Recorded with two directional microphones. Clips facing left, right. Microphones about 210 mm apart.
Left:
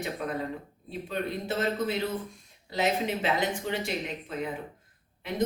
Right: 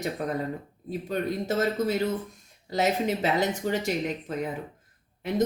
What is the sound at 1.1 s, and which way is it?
Speech, 45° right (ahead or behind).